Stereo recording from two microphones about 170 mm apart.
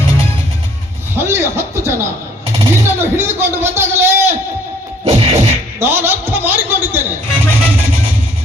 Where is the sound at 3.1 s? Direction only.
15° right (ahead or behind).